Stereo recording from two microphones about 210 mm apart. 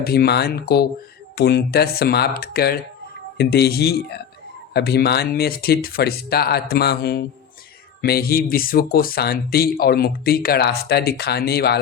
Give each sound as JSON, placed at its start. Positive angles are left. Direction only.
{"t": 0.0, "sound": "speech", "side_deg": 45}